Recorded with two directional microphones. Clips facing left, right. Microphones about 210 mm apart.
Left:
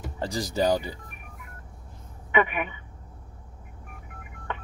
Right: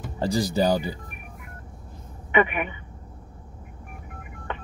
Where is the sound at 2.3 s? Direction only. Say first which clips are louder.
Right 2 dB; 20° right (ahead or behind).